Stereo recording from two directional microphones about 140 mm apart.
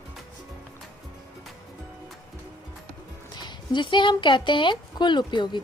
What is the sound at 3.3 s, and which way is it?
Speech, 30° left (ahead or behind).